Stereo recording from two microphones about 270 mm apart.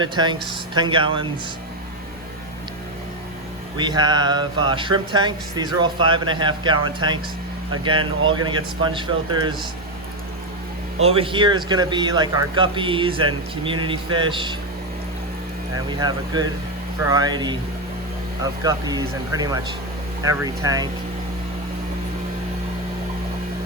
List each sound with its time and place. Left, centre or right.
0.0 s speech: centre
3.8 s speech: centre
8.4 s speech: centre
11.0 s speech: centre
15.7 s speech: centre
18.6 s speech: centre